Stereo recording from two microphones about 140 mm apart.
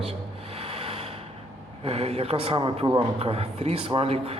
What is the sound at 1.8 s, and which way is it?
A man's voice, 45° right (ahead or behind).